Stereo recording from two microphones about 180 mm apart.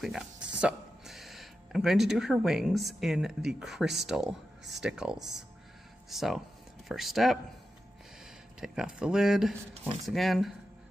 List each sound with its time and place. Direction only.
0.0 s speech: 5° right (ahead or behind)
8.5 s speech: 5° right (ahead or behind)